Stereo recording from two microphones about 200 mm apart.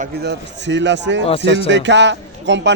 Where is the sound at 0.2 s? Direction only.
60° right (ahead or behind).